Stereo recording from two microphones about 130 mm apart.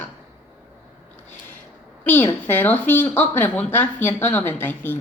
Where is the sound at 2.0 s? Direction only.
15° left (ahead or behind).